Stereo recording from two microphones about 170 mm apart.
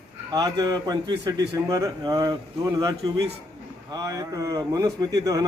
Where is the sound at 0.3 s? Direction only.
25° right (ahead or behind).